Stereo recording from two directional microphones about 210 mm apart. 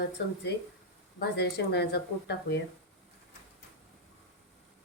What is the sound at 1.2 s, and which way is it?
Speech, 55° left (ahead or behind).